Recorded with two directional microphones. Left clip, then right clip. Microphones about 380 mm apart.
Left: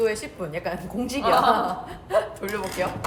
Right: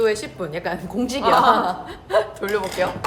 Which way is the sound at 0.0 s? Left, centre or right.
Right.